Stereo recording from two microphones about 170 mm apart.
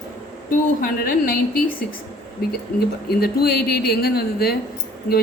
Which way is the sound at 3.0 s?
65° left (ahead or behind).